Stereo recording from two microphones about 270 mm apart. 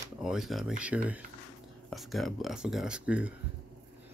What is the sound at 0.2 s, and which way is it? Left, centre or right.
Speech, centre.